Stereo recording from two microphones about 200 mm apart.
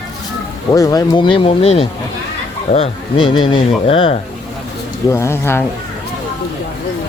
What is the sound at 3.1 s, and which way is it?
Speech, 80° left.